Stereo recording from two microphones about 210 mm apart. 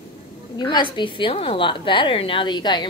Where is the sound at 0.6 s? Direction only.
20° left (ahead or behind).